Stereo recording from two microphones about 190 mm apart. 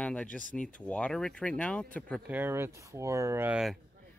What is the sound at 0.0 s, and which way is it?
Speech, 5° left (ahead or behind).